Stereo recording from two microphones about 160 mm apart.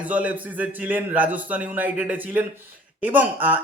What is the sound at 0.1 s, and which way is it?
Speech, 10° right (ahead or behind).